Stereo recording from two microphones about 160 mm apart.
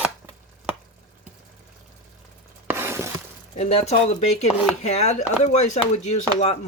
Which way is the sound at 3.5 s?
45° left (ahead or behind).